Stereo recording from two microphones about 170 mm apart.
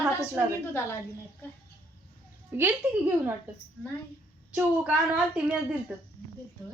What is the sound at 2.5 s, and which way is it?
Speech, 10° right (ahead or behind).